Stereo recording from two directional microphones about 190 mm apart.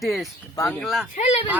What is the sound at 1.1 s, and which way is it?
Speech, 35° left (ahead or behind).